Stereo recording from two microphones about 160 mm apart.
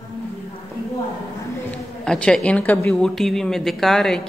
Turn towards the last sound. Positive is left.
turn(degrees=0)  # may be behind; listen again after turning